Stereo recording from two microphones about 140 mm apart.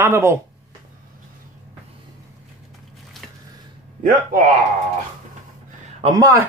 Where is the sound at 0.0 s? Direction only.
20° right (ahead or behind).